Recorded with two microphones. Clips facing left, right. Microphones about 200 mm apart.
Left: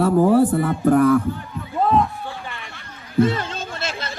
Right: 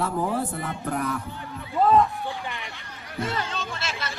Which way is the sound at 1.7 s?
15° left (ahead or behind).